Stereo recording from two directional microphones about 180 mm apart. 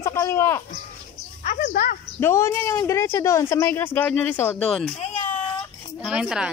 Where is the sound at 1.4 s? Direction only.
40° left (ahead or behind).